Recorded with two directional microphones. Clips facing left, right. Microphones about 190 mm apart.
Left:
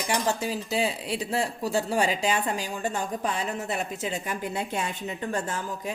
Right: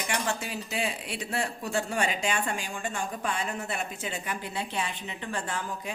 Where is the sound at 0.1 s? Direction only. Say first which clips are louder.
Left 6 dB; 35° left (ahead or behind).